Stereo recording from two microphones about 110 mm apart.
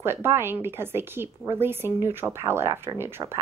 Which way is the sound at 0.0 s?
20° right (ahead or behind).